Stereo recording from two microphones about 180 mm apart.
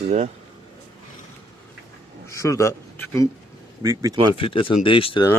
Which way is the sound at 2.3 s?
15° left (ahead or behind).